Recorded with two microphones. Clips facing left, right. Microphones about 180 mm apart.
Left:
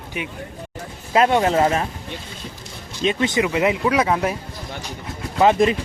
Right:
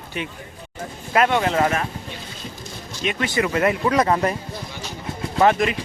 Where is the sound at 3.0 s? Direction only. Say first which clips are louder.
Left 3 dB; 20° left (ahead or behind).